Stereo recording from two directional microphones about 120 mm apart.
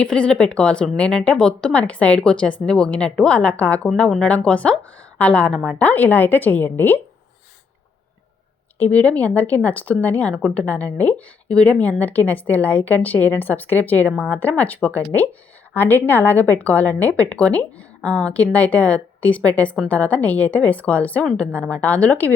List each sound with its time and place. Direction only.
0.0 s a woman's voice: 10° left (ahead or behind)
8.8 s a woman's voice: 10° left (ahead or behind)